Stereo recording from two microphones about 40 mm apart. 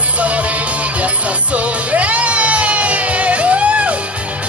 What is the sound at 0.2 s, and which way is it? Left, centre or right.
Music, right.